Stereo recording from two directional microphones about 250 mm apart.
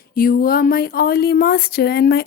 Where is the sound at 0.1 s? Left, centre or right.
Left.